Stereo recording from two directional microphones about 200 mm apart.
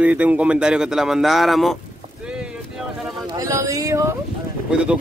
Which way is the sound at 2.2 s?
5° right (ahead or behind).